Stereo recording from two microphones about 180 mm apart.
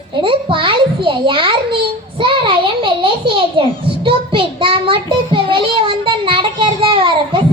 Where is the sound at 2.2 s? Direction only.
25° right (ahead or behind).